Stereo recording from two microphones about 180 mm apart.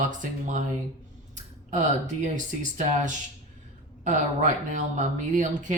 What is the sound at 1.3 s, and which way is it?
Clicking, 45° right (ahead or behind).